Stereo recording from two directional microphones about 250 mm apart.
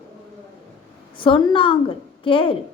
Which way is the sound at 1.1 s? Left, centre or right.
Centre.